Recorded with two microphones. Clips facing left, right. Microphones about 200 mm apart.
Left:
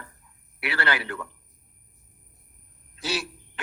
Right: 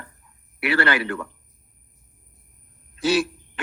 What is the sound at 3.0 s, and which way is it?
Speech, 50° right (ahead or behind).